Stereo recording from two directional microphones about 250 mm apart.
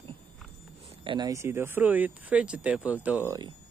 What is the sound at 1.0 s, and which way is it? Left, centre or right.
Speech, centre.